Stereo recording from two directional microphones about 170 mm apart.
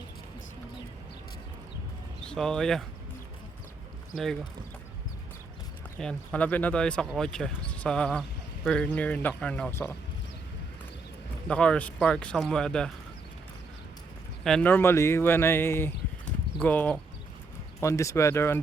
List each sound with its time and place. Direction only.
2.2 s speech: 5° left (ahead or behind)
4.1 s speech: centre (ahead or behind)
6.0 s a man's voice: 5° left (ahead or behind)
11.4 s speech: 5° left (ahead or behind)
14.4 s a man's voice: 5° left (ahead or behind)